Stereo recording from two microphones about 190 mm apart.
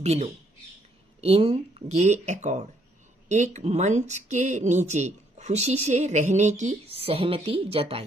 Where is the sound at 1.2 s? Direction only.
30° right (ahead or behind).